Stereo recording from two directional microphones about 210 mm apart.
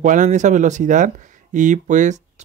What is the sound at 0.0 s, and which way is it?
Speech, 35° right (ahead or behind).